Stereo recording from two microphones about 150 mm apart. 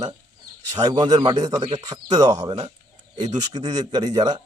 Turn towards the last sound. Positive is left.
turn(degrees=-25)  # may be behind; listen again after turning